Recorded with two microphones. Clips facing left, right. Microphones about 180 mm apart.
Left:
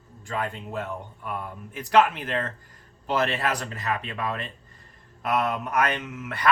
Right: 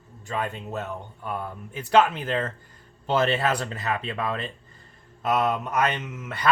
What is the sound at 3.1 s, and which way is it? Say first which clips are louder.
Speech: right 3 dB; 25° right (ahead or behind).